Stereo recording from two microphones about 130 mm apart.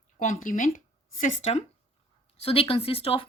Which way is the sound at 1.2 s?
65° left (ahead or behind).